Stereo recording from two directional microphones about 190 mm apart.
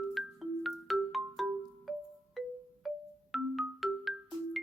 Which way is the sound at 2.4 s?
Centre (ahead or behind).